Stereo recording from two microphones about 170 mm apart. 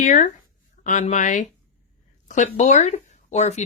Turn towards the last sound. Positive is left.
turn(degrees=45)  # may be behind; listen again after turning